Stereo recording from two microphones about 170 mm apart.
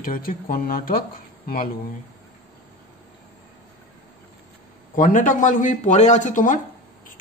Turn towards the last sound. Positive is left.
turn(degrees=50)  # may be behind; listen again after turning